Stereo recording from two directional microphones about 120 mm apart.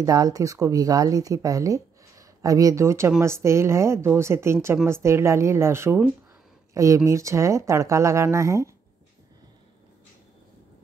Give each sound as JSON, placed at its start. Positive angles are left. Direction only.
{"t": 0.0, "sound": "speech", "side_deg": -30}